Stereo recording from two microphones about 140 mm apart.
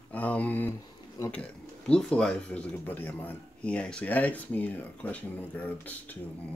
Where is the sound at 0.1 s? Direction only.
10° left (ahead or behind).